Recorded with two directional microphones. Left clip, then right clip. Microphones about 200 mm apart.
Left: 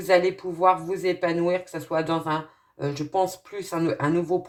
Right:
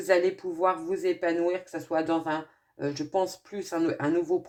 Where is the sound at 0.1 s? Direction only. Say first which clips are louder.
Left 4 dB; 30° right (ahead or behind).